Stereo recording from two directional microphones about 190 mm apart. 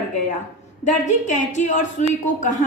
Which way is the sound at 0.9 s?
40° left (ahead or behind).